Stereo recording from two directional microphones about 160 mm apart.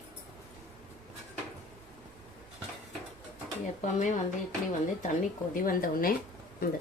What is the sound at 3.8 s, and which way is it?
Speech, 50° left (ahead or behind).